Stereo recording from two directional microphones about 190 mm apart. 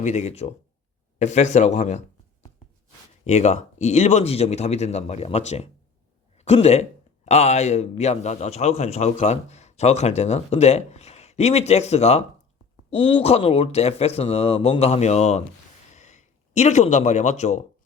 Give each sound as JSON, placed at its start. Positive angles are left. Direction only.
{"t": 0.0, "sound": "a man's voice", "side_deg": 35}
{"t": 3.2, "sound": "a man's voice", "side_deg": 40}
{"t": 15.9, "sound": "a sound", "side_deg": 40}